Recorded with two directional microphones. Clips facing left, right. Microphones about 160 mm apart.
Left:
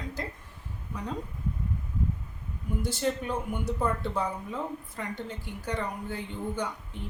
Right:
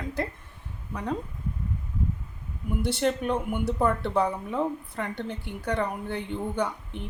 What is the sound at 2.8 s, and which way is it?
Speech, 65° right (ahead or behind).